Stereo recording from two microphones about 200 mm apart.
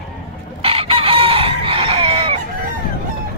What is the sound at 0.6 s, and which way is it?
Chicken, 30° right (ahead or behind).